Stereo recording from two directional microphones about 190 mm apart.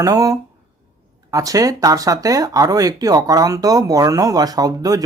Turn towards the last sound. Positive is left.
turn(degrees=-20)  # may be behind; listen again after turning